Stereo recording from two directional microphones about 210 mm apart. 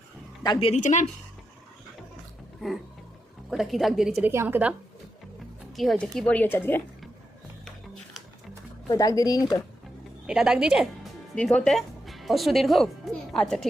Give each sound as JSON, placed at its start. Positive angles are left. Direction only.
{"t": 0.4, "sound": "a woman's voice", "side_deg": 20}
{"t": 0.7, "sound": "speech", "side_deg": 35}
{"t": 3.5, "sound": "a woman's voice", "side_deg": 0}
{"t": 5.7, "sound": "speech", "side_deg": 0}
{"t": 8.9, "sound": "speech", "side_deg": 15}
{"t": 10.2, "sound": "speech", "side_deg": -5}